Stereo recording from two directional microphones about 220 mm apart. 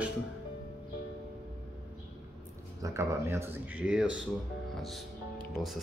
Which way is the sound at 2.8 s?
15° right (ahead or behind).